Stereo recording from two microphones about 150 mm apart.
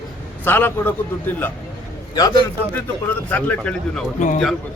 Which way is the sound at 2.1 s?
25° left (ahead or behind).